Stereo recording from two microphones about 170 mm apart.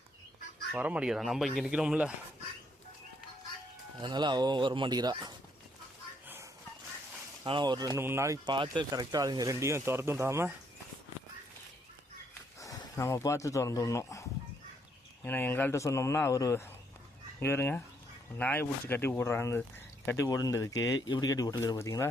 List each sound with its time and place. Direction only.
0.7 s speech: 10° right (ahead or behind)
4.0 s speech: 25° right (ahead or behind)
6.2 s chicken: 15° right (ahead or behind)
7.4 s speech: 30° right (ahead or behind)
12.5 s speech: 20° left (ahead or behind)